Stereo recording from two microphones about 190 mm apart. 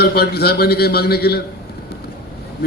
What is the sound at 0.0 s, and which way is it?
A man's voice, 55° left (ahead or behind).